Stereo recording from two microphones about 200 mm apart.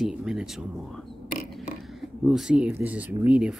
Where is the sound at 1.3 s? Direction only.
40° left (ahead or behind).